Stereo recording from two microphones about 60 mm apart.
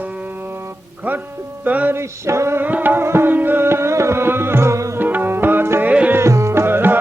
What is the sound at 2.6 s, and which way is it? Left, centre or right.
Tabla, right.